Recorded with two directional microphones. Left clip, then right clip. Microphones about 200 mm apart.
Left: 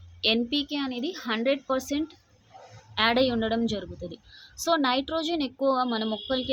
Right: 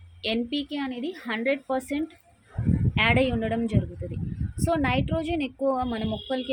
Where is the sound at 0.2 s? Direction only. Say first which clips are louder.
Left 3 dB; 15° left (ahead or behind).